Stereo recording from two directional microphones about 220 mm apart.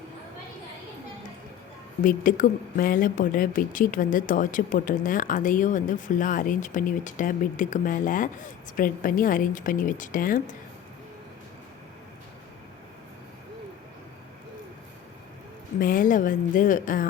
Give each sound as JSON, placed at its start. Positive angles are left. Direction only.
{"t": 2.0, "sound": "speech", "side_deg": 40}
{"t": 15.8, "sound": "speech", "side_deg": 40}